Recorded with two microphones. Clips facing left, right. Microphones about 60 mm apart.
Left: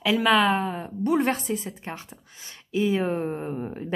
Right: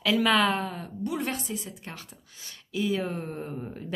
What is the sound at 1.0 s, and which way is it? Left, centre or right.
Speech, left.